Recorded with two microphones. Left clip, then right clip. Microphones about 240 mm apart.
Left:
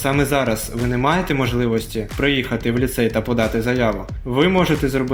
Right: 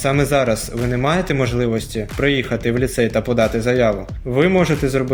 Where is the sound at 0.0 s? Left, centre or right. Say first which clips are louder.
Right 2 dB; right.